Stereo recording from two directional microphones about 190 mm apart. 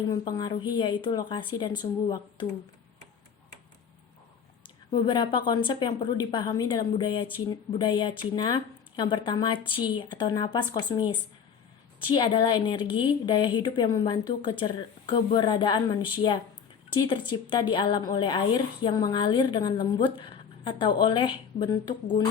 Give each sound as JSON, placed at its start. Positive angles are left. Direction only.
{"t": 0.1, "sound": "a woman's voice", "side_deg": 20}
{"t": 4.9, "sound": "a woman's voice", "side_deg": 25}